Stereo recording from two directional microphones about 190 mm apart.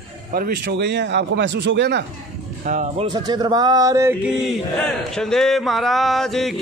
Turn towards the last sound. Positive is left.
turn(degrees=0)  # may be behind; listen again after turning